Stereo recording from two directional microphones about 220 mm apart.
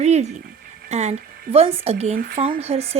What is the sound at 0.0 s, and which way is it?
Speech, 30° right (ahead or behind).